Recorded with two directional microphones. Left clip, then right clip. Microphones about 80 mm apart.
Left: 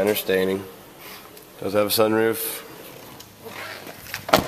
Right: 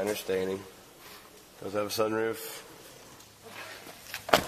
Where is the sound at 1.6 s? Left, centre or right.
Centre.